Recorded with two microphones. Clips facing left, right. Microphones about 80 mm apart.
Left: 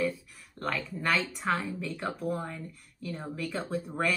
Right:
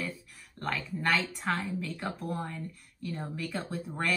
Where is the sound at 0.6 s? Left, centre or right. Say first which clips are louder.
Left 1 dB; centre.